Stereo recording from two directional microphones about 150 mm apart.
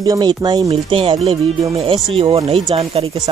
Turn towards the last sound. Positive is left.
turn(degrees=-35)  # may be behind; listen again after turning